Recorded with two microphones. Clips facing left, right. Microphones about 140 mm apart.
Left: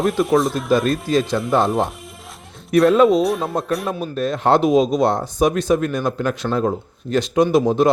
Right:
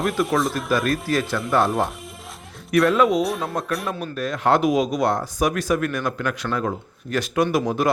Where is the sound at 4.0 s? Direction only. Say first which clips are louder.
Left 5 dB; 30° left (ahead or behind).